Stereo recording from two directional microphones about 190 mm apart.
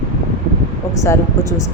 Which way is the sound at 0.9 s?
15° left (ahead or behind).